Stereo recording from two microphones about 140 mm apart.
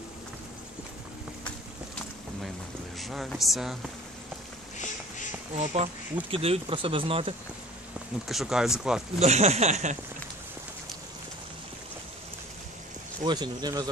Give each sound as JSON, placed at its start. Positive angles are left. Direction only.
{"t": 3.0, "sound": "speech", "side_deg": 0}
{"t": 4.7, "sound": "a sound", "side_deg": 60}
{"t": 5.6, "sound": "speech", "side_deg": -55}
{"t": 6.3, "sound": "speech", "side_deg": -40}
{"t": 8.3, "sound": "speech", "side_deg": -5}
{"t": 9.2, "sound": "speech", "side_deg": -50}
{"t": 13.2, "sound": "speech", "side_deg": -30}